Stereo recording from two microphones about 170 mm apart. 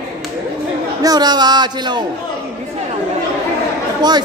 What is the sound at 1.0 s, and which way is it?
Speech, 25° right (ahead or behind).